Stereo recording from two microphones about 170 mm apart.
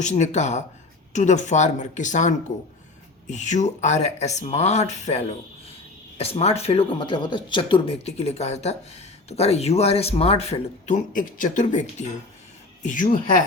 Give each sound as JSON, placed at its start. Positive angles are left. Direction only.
{"t": 0.0, "sound": "speech", "side_deg": 45}